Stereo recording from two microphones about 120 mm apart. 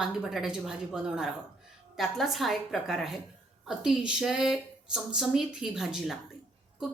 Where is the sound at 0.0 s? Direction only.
5° right (ahead or behind).